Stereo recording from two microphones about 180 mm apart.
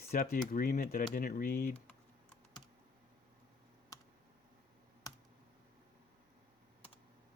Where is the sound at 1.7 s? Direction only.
5° left (ahead or behind).